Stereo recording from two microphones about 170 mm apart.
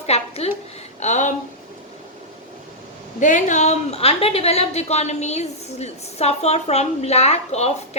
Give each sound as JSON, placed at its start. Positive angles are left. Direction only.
{"t": 0.0, "sound": "a sound", "side_deg": 35}
{"t": 0.9, "sound": "speech", "side_deg": 45}
{"t": 3.2, "sound": "a woman's voice", "side_deg": 45}